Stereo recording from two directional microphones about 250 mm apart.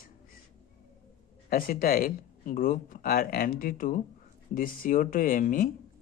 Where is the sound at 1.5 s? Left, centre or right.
Left.